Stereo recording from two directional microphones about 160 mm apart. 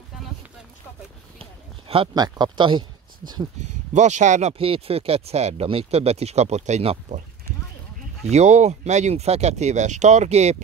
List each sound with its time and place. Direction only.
1.4 s speech: 35° right (ahead or behind)
3.9 s speech: 50° right (ahead or behind)
8.3 s speech: 45° right (ahead or behind)